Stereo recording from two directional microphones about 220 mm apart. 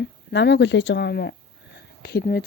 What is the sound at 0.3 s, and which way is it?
A woman's voice, 50° left (ahead or behind).